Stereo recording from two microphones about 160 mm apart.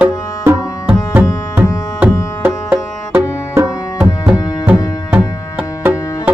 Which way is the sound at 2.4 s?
10° right (ahead or behind).